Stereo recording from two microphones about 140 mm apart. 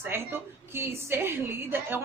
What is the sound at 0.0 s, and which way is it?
A woman's voice, 15° right (ahead or behind).